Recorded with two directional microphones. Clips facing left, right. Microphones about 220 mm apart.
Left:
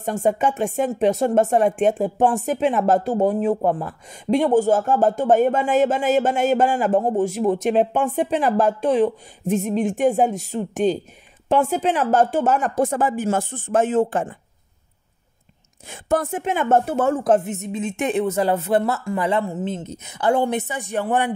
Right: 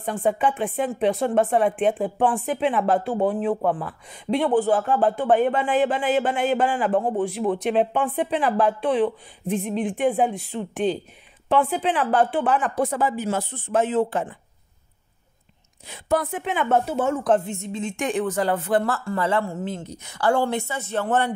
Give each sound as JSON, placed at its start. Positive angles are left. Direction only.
{"t": 0.0, "sound": "speech", "side_deg": 45}
{"t": 15.9, "sound": "speech", "side_deg": 50}
{"t": 17.1, "sound": "speech", "side_deg": 25}